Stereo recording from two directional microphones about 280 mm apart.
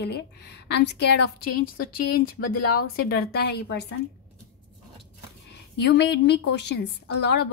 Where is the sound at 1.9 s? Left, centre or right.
Left.